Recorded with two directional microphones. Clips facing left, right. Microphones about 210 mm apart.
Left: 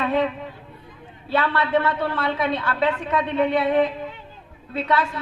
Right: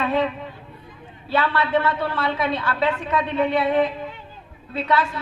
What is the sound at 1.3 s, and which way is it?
A man's voice, 55° left (ahead or behind).